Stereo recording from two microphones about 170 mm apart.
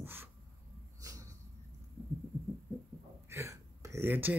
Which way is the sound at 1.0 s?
20° right (ahead or behind).